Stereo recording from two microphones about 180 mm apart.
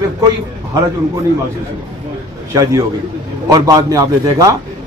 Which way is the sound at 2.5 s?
20° right (ahead or behind).